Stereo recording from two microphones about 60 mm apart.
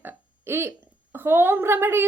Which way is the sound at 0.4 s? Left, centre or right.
Right.